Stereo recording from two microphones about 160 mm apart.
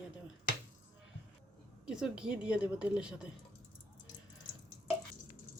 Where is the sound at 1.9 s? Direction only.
5° right (ahead or behind).